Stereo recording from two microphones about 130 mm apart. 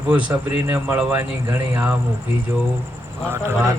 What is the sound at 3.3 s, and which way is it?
Speech, 20° right (ahead or behind).